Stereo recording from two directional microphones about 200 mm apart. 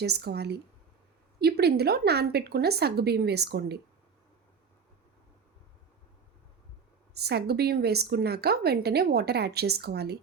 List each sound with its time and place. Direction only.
0.0 s a woman's voice: 55° right (ahead or behind)
7.1 s a woman's voice: 55° right (ahead or behind)